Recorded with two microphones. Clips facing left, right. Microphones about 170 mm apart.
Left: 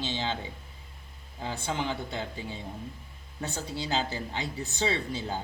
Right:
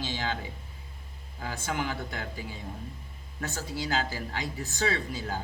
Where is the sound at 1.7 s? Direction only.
20° left (ahead or behind).